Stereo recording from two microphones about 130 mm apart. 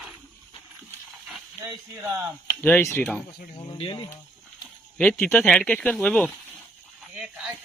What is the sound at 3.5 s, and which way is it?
Speech, 40° left (ahead or behind).